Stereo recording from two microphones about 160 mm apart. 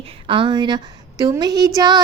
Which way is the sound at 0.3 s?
30° right (ahead or behind).